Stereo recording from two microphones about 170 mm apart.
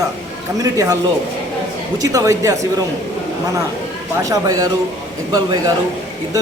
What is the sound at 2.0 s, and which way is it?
Speech, 20° right (ahead or behind).